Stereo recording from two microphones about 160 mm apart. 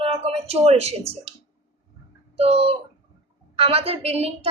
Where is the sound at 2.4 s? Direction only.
40° right (ahead or behind).